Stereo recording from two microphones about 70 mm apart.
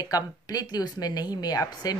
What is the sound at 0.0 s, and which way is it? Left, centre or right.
Speech, left.